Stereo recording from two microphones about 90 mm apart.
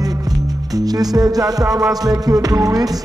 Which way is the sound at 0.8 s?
45° right (ahead or behind).